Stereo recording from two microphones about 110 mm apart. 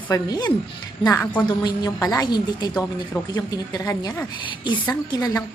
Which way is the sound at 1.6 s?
35° left (ahead or behind).